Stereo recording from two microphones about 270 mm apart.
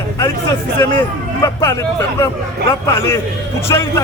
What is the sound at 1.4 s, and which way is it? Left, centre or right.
Speech, centre.